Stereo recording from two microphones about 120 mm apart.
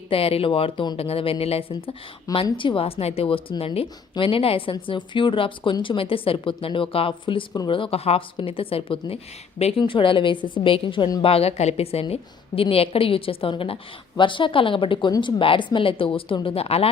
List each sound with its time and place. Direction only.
0.1 s a woman's voice: 55° left (ahead or behind)